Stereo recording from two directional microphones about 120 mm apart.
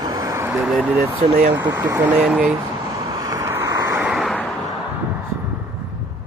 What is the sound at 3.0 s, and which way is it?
Vehicle, 30° right (ahead or behind).